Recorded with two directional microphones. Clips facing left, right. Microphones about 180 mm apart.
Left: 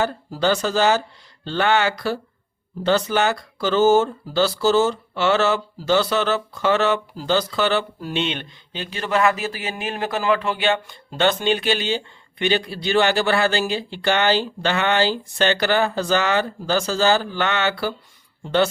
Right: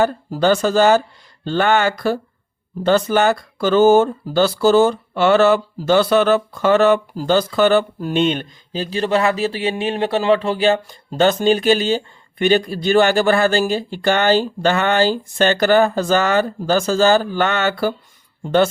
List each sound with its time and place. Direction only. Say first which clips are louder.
0.0 s speech: right 5 dB; 50° right (ahead or behind)